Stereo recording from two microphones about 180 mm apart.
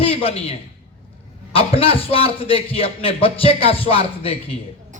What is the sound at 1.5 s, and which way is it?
Speech, 30° left (ahead or behind).